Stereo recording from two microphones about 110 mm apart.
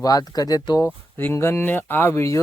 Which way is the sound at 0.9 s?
20° left (ahead or behind).